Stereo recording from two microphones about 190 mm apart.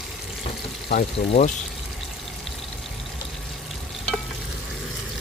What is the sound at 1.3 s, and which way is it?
Speech, 35° left (ahead or behind).